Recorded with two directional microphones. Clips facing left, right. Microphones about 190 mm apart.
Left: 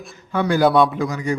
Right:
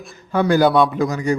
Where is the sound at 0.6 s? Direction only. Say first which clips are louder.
Left 2 dB; centre (ahead or behind).